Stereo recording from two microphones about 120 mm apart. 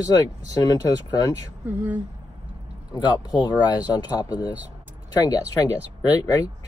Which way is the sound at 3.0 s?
35° left (ahead or behind).